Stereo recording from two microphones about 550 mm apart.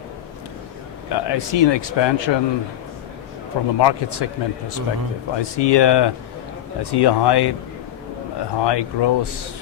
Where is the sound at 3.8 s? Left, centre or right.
Left.